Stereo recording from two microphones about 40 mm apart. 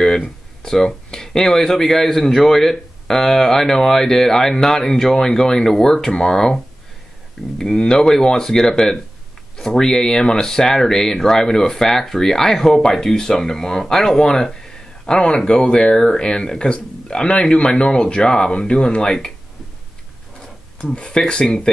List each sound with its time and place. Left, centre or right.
0.0 s speech: centre
14.4 s a sound: centre
15.3 s speech: left
20.9 s speech: left